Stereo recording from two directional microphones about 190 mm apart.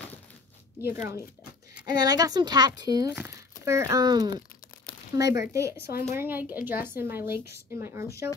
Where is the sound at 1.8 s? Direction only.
20° right (ahead or behind).